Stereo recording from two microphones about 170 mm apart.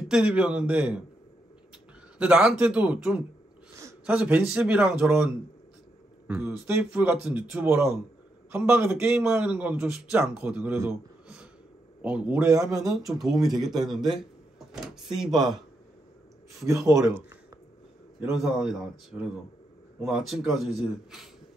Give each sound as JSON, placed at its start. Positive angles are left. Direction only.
{"t": 0.0, "sound": "a man's voice", "side_deg": -5}
{"t": 2.1, "sound": "a man's voice", "side_deg": -10}
{"t": 13.0, "sound": "a man's voice", "side_deg": 0}
{"t": 16.5, "sound": "speech", "side_deg": -20}
{"t": 18.3, "sound": "a man's voice", "side_deg": -5}